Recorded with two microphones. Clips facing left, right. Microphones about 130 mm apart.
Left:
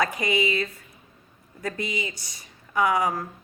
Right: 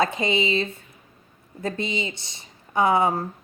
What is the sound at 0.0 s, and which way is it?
A woman's voice, 25° right (ahead or behind).